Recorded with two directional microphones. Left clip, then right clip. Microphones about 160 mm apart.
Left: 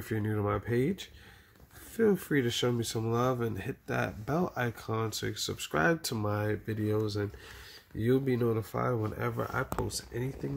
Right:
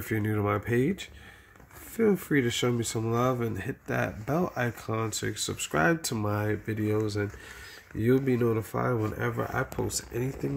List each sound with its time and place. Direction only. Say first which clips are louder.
0.0 s speech: right 4 dB; 5° right (ahead or behind)